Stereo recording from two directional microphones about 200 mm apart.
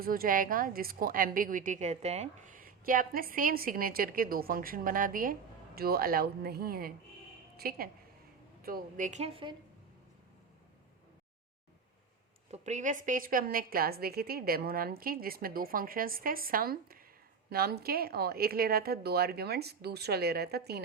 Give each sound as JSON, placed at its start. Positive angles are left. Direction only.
{"t": 0.0, "sound": "a woman's voice", "side_deg": -45}
{"t": 12.5, "sound": "a woman's voice", "side_deg": -35}